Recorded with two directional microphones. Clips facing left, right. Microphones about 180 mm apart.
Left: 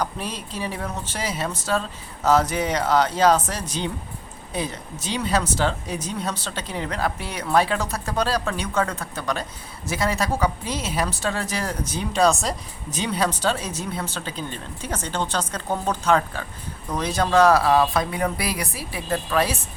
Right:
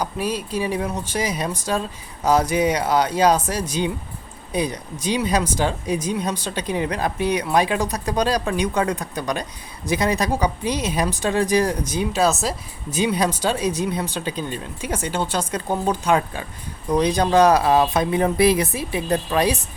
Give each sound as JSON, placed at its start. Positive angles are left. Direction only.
{"t": 0.0, "sound": "speech", "side_deg": -10}